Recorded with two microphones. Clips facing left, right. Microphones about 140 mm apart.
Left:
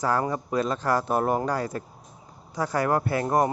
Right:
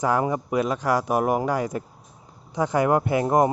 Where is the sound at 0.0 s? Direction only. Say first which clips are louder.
Right 3 dB; 15° right (ahead or behind).